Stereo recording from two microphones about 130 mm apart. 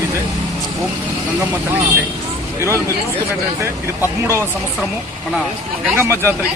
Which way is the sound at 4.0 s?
20° right (ahead or behind).